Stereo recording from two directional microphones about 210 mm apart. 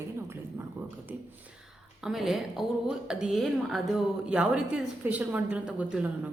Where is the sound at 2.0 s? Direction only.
Centre (ahead or behind).